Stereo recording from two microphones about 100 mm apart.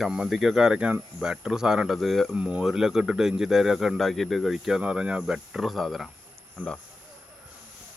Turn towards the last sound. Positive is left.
turn(degrees=10)  # may be behind; listen again after turning